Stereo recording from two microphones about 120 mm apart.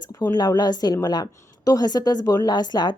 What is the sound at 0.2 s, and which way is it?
A woman's voice, 35° left (ahead or behind).